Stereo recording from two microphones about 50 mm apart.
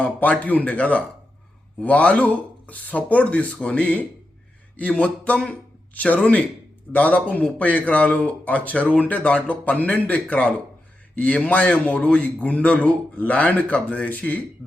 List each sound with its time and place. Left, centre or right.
0.0 s speech: left